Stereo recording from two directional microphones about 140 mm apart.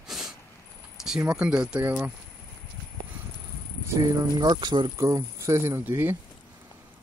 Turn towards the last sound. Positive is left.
turn(degrees=-15)  # may be behind; listen again after turning